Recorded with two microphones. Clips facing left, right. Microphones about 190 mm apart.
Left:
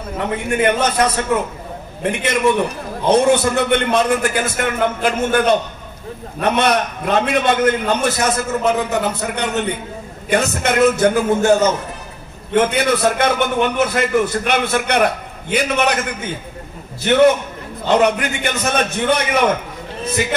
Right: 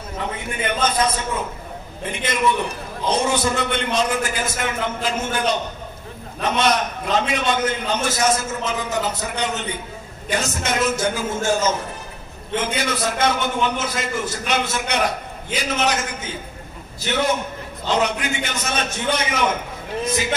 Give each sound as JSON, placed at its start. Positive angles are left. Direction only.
{"t": 0.2, "sound": "a man's voice", "side_deg": 65}
{"t": 3.1, "sound": "a man's voice", "side_deg": 60}
{"t": 17.0, "sound": "a man's voice", "side_deg": 60}